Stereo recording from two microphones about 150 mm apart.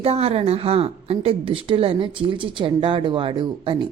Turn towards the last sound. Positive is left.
turn(degrees=-30)  # may be behind; listen again after turning